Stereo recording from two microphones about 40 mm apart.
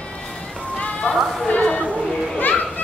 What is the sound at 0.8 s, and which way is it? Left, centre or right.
Music, left.